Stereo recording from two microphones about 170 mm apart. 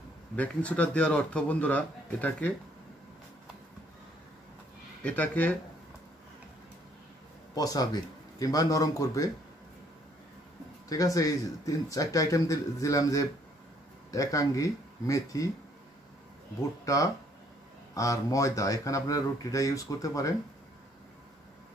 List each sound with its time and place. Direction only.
0.4 s a man's voice: 10° left (ahead or behind)
5.0 s a man's voice: 10° left (ahead or behind)
7.5 s speech: 20° left (ahead or behind)
10.9 s speech: 20° left (ahead or behind)
16.8 s speech: 20° left (ahead or behind)